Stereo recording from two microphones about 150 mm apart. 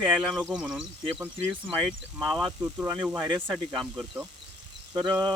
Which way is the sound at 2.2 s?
25° right (ahead or behind).